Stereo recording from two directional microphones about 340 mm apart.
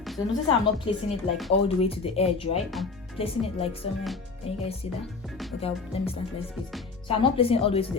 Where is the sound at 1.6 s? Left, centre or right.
Centre.